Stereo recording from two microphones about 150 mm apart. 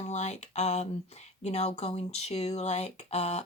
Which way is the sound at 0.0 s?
50° left (ahead or behind).